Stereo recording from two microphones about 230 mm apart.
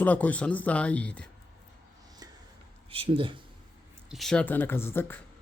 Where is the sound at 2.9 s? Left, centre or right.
Right.